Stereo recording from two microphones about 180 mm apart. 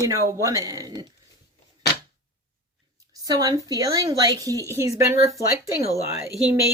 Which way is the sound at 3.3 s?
20° right (ahead or behind).